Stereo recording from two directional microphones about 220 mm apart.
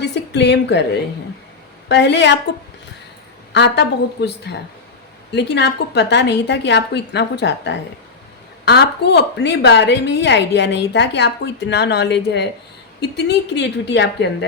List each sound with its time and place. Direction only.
0.0 s a sound: 50° left (ahead or behind)
1.9 s a woman's voice: 50° left (ahead or behind)
3.5 s a woman's voice: 50° left (ahead or behind)